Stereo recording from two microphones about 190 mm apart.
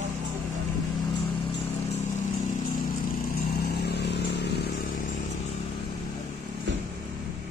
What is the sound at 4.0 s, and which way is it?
Vehicle, 60° left (ahead or behind).